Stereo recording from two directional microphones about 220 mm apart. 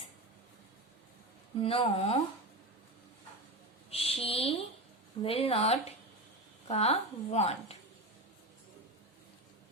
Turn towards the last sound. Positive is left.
turn(degrees=30)  # may be behind; listen again after turning